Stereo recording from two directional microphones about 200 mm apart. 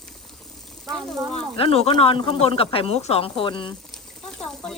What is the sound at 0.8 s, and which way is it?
Speech, centre (ahead or behind).